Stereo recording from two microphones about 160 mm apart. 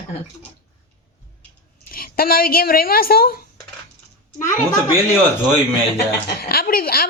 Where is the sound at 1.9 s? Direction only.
65° left (ahead or behind).